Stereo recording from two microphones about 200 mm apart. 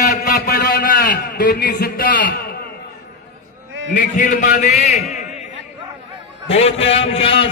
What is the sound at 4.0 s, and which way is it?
A man's voice, 40° left (ahead or behind).